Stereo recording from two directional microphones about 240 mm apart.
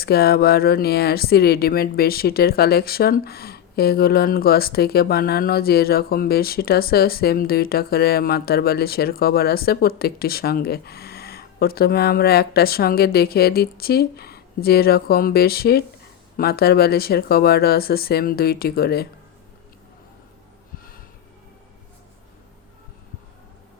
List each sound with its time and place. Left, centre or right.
0.0 s speech: left